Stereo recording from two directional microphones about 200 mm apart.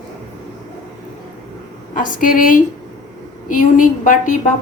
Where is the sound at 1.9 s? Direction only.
45° left (ahead or behind).